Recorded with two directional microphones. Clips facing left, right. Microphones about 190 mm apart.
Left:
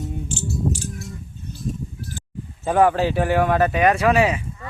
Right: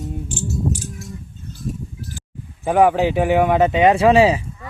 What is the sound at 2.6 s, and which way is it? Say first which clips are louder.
Speech: right 2 dB; 15° right (ahead or behind).